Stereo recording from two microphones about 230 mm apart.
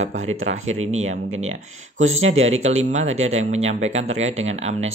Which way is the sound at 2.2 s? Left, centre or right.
Right.